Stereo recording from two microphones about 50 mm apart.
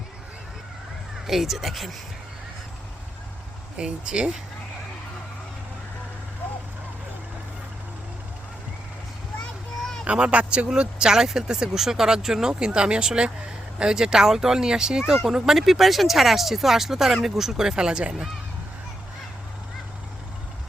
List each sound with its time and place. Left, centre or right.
1.3 s speech: centre
3.8 s speech: centre
9.4 s a sound: centre
10.1 s speech: right